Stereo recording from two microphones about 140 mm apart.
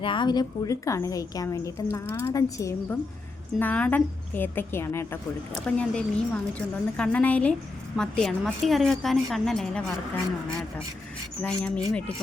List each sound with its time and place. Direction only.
0.0 s a woman's voice: 35° left (ahead or behind)
3.6 s a woman's voice: 10° left (ahead or behind)
5.6 s a woman's voice: 5° left (ahead or behind)
11.4 s a woman's voice: 10° left (ahead or behind)